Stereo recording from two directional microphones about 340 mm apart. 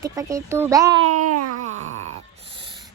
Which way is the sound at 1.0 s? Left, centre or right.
Right.